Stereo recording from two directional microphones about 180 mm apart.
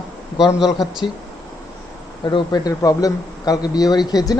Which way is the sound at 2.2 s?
25° left (ahead or behind).